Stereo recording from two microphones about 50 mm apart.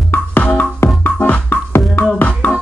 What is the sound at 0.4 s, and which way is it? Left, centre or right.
Music, left.